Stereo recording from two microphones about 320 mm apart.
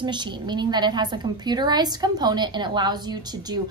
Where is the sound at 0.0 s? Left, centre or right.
Centre.